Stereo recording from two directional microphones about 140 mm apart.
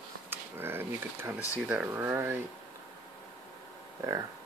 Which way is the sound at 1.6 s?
10° right (ahead or behind).